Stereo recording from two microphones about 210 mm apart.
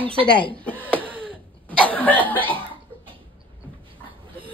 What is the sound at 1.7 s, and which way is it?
Cough, 5° left (ahead or behind).